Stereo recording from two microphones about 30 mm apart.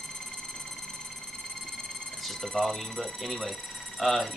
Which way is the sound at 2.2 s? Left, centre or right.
Centre.